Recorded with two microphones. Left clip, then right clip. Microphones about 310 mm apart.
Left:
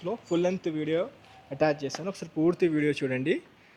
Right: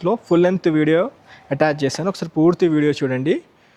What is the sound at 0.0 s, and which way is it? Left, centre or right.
Speech, right.